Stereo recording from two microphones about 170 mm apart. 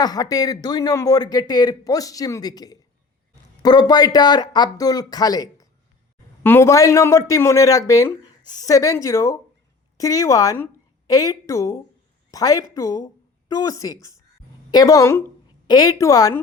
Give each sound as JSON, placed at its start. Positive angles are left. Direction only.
{"t": 0.0, "sound": "a woman's voice", "side_deg": 20}